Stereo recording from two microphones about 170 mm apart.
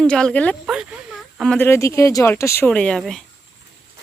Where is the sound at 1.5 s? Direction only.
15° left (ahead or behind).